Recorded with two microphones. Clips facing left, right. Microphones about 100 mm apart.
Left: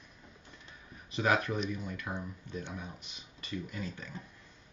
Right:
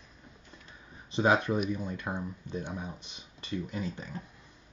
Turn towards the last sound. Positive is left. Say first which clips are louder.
# right 4 dB
turn(degrees=-20)  # may be behind; listen again after turning